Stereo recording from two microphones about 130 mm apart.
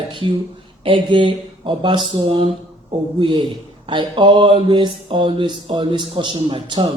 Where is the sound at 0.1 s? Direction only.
40° right (ahead or behind).